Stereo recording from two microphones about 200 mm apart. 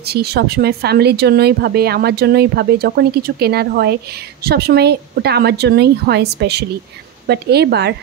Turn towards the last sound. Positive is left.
turn(degrees=-55)  # may be behind; listen again after turning